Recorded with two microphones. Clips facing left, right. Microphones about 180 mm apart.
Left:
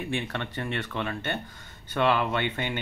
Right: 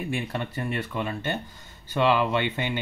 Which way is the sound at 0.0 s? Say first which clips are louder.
Right 1 dB; 10° right (ahead or behind).